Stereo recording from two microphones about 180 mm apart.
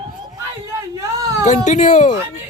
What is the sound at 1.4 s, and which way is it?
Speech, 40° left (ahead or behind).